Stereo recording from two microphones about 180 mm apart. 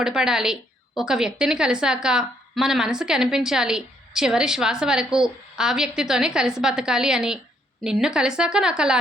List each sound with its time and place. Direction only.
0.0 s a woman's voice: 5° right (ahead or behind)